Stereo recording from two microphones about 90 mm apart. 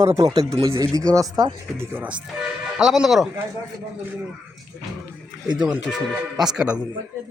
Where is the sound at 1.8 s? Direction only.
25° right (ahead or behind).